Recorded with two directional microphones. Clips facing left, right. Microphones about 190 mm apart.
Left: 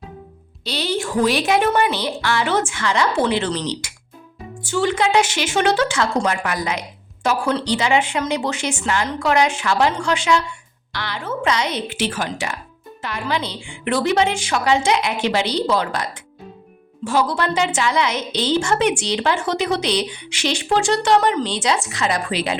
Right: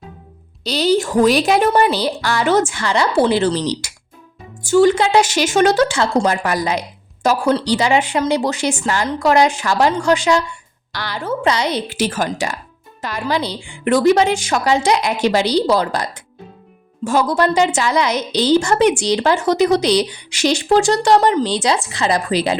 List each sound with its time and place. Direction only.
0.6 s a woman's voice: 40° right (ahead or behind)